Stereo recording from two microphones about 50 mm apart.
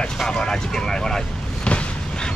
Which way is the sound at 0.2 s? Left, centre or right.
Centre.